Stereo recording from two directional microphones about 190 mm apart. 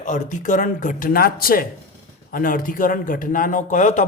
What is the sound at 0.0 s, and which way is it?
A man's voice, 40° left (ahead or behind).